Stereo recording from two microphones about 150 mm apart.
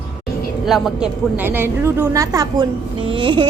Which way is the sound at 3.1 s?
35° right (ahead or behind).